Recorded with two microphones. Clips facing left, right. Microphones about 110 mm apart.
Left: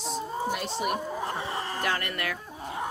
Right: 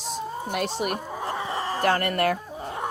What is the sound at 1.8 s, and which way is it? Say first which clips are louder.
Speech: right 11 dB; 45° right (ahead or behind).